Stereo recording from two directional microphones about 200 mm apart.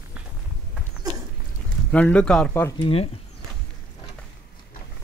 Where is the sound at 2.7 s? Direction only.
30° left (ahead or behind).